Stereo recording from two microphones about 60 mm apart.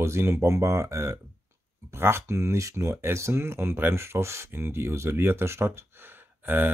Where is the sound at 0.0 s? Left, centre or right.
Right.